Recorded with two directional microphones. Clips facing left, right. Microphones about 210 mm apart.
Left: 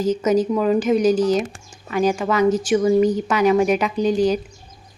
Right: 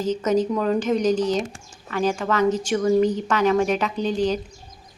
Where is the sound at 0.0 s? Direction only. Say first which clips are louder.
Left 3 dB; 10° left (ahead or behind).